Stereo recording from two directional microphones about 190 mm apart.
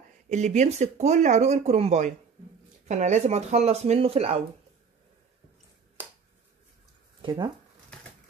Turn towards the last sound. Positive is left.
turn(degrees=-25)  # may be behind; listen again after turning